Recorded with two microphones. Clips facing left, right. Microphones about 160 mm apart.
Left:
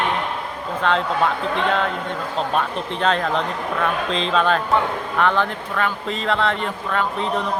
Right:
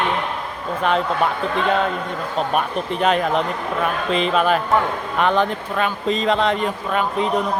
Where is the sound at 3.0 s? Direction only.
10° right (ahead or behind).